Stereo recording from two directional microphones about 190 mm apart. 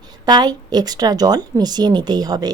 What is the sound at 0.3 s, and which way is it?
Speech, 20° right (ahead or behind).